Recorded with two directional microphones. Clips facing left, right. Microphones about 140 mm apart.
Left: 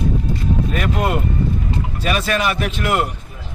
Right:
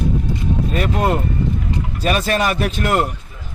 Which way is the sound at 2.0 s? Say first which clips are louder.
Right 2 dB; 40° right (ahead or behind).